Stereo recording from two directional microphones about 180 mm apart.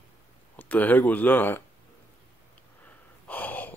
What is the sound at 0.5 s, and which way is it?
Speech, 10° left (ahead or behind).